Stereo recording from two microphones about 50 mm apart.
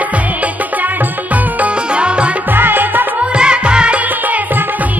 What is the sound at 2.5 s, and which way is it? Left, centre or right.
Music, right.